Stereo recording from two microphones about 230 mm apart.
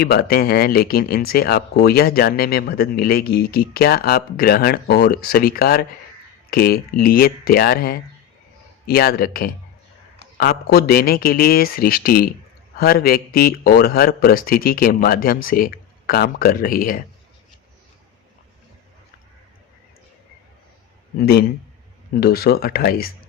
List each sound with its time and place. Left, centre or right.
0.0 s speech: left
21.2 s a man's voice: left